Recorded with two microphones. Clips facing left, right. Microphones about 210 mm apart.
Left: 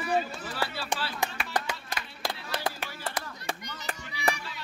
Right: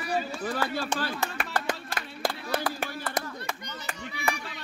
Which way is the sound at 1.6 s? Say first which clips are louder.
Right 4 dB; 50° right (ahead or behind).